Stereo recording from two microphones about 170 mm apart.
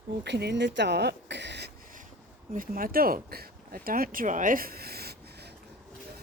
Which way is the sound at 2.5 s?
55° right (ahead or behind).